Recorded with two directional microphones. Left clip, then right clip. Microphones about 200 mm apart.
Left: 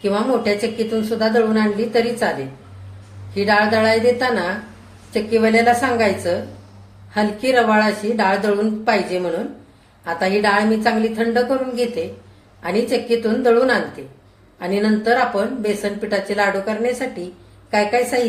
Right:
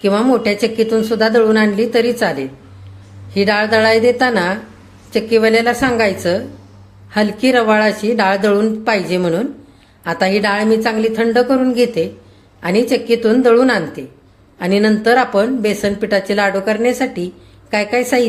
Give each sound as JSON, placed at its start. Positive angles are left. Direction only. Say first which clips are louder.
{"t": 0.0, "sound": "speech", "louder": "right 5 dB", "side_deg": -40}
{"t": 3.3, "sound": "speech", "louder": "right 2 dB", "side_deg": -40}